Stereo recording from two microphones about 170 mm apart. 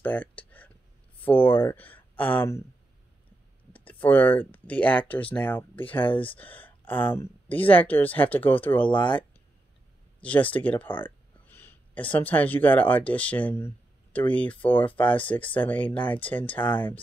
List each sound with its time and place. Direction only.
0.0 s a sound: 10° left (ahead or behind)
3.7 s a sound: 10° left (ahead or behind)
5.9 s speech: 30° left (ahead or behind)
6.2 s speech: 10° left (ahead or behind)
10.2 s speech: 10° left (ahead or behind)
16.6 s speech: 30° left (ahead or behind)